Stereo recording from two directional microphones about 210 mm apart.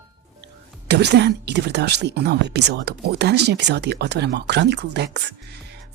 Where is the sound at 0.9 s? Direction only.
55° right (ahead or behind).